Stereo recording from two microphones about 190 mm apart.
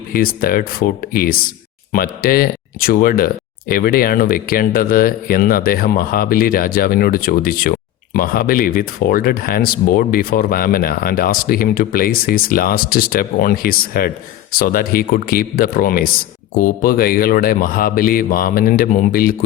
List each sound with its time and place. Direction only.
0.1 s speech: 50° left (ahead or behind)